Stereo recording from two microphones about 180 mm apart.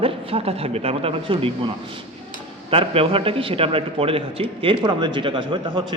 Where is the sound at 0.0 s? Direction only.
30° right (ahead or behind).